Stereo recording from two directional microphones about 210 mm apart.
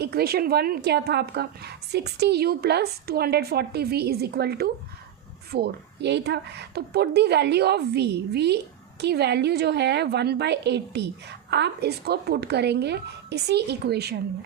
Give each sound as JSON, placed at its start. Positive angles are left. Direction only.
{"t": 0.0, "sound": "a woman's voice", "side_deg": -50}